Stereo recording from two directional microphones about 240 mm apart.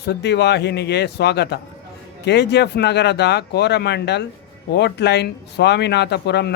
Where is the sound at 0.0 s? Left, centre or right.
Left.